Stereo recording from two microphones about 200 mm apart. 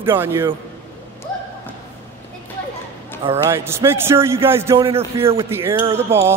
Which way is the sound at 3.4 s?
15° right (ahead or behind).